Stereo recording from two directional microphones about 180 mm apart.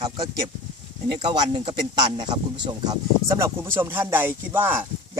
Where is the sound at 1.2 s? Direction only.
25° right (ahead or behind).